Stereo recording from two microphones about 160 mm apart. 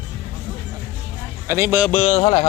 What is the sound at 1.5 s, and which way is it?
Speech, 15° right (ahead or behind).